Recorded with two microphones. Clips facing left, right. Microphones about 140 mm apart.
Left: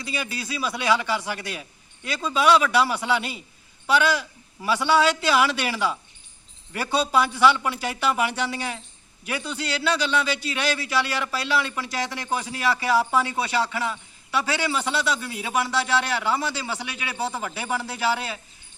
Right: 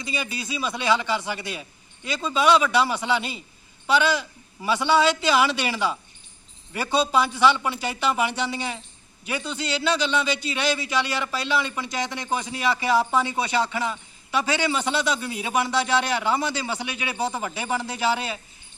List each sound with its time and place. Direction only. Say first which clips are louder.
0.0 s a man's voice: even; centre (ahead or behind)